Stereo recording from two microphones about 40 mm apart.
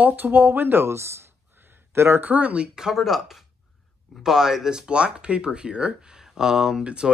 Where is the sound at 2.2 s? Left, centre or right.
Right.